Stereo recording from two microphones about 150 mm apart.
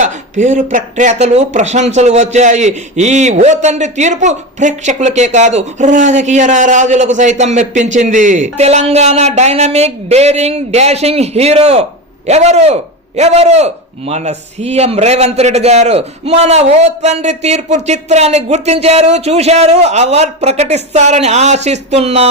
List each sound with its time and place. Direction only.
0.0 s speech: 55° right (ahead or behind)